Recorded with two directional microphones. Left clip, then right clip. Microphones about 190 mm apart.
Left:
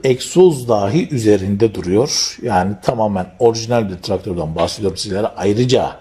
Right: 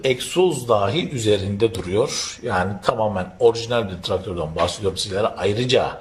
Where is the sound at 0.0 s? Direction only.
30° left (ahead or behind).